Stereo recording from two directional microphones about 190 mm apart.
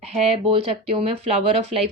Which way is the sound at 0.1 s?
35° right (ahead or behind).